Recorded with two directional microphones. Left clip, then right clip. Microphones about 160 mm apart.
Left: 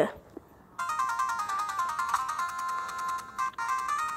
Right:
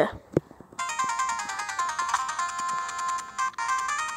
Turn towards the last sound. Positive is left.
turn(degrees=-35)  # may be behind; listen again after turning